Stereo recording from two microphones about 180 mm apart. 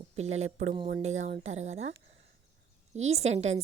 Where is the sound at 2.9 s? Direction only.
35° right (ahead or behind).